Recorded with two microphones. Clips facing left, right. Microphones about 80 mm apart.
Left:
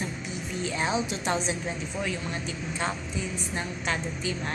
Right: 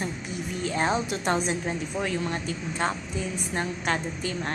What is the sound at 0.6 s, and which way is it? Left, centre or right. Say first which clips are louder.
A woman's voice: right 2 dB; right.